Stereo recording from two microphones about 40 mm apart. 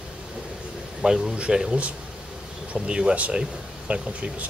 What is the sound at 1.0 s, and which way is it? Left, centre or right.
Speech, centre.